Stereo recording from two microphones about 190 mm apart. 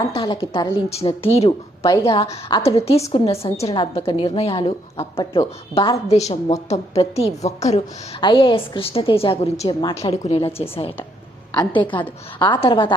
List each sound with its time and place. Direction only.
0.1 s a woman's voice: 30° left (ahead or behind)